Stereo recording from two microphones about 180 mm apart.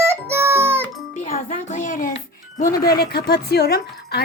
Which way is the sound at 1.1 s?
45° left (ahead or behind).